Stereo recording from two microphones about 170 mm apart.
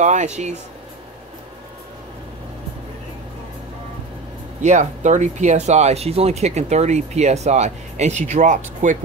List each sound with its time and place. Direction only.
0.0 s speech: 45° right (ahead or behind)
4.6 s speech: 45° right (ahead or behind)